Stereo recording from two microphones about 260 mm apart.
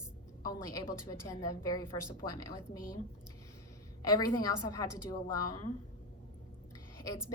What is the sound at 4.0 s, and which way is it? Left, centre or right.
A woman's voice, centre.